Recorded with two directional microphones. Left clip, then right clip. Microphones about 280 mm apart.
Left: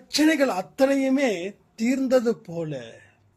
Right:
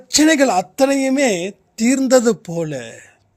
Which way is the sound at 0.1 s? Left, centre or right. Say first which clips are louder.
Right 7 dB; right.